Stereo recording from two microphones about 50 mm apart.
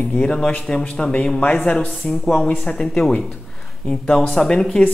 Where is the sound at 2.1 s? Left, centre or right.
Centre.